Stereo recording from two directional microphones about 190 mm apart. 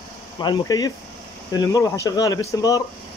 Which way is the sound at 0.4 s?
20° left (ahead or behind).